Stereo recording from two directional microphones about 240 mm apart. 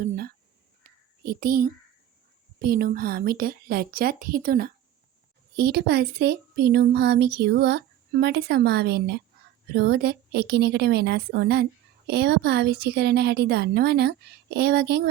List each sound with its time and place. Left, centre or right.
0.0 s crow: right
1.2 s a woman's voice: right